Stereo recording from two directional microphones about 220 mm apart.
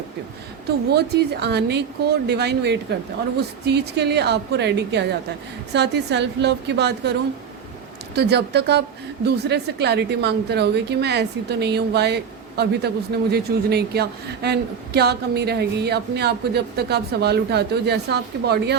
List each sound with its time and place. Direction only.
0.9 s speech: 50° right (ahead or behind)